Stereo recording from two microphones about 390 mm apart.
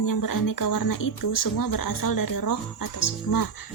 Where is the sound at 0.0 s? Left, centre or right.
Left.